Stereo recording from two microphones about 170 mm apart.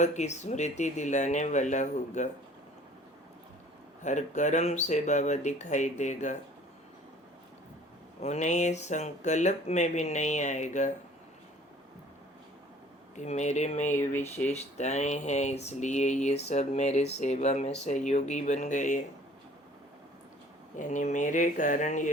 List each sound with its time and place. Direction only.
0.0 s speech: 45° left (ahead or behind)
4.0 s speech: 45° left (ahead or behind)
8.2 s speech: 45° left (ahead or behind)
13.1 s speech: 45° left (ahead or behind)
14.1 s speech: 15° left (ahead or behind)
14.4 s speech: 40° left (ahead or behind)
20.7 s speech: 45° left (ahead or behind)